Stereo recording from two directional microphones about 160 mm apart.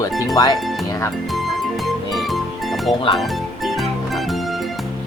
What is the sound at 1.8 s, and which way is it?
Music, centre (ahead or behind).